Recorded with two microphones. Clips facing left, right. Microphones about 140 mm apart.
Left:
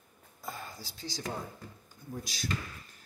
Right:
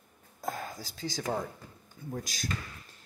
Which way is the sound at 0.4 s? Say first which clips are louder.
Right 6 dB; 45° right (ahead or behind).